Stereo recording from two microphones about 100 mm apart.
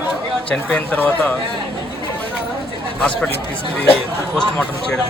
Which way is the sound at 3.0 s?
5° left (ahead or behind).